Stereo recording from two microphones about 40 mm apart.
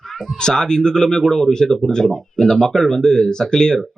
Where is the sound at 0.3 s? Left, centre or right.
Centre.